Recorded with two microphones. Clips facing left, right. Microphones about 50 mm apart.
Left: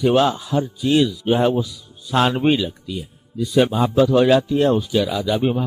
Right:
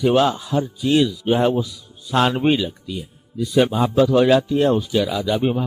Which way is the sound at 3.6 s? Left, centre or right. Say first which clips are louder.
Even; centre.